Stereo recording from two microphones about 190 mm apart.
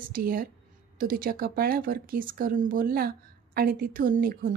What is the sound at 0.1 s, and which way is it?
Speech, 50° right (ahead or behind).